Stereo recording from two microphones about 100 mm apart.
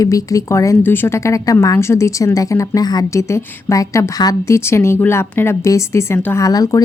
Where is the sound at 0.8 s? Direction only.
20° left (ahead or behind).